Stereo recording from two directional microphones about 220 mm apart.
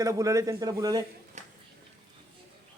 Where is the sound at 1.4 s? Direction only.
35° right (ahead or behind).